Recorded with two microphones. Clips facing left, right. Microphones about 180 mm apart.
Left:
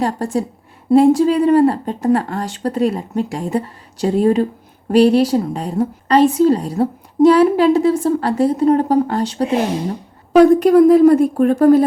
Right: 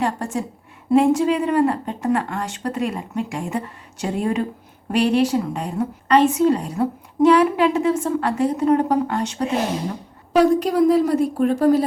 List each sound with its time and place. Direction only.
0.0 s a woman's voice: 35° left (ahead or behind)
10.3 s speech: 55° left (ahead or behind)